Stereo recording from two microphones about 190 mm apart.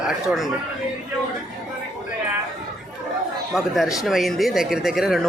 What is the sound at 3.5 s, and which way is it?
Speech, centre (ahead or behind).